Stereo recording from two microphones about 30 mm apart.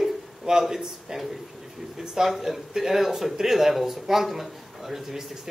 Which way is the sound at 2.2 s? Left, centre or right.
Centre.